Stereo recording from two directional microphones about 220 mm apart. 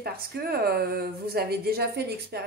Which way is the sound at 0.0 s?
45° right (ahead or behind).